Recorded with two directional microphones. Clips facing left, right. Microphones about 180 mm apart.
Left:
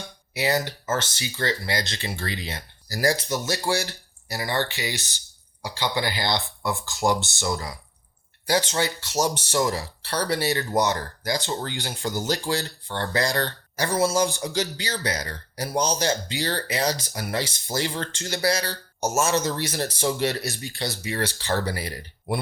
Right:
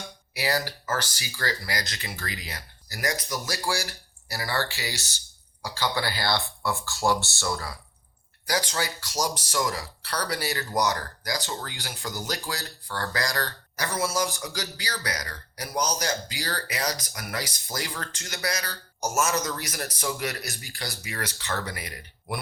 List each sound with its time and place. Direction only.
0.3 s speech: 25° left (ahead or behind)